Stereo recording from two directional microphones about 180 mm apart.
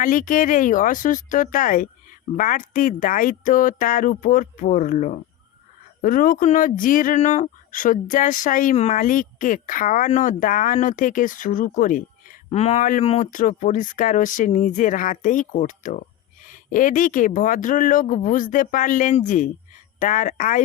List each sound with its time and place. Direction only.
0.0 s speech: 50° left (ahead or behind)
12.5 s speech: 35° left (ahead or behind)